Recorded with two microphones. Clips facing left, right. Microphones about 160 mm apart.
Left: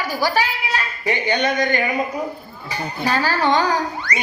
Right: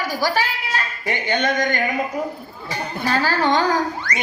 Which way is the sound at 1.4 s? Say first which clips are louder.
Left 1 dB; 45° right (ahead or behind).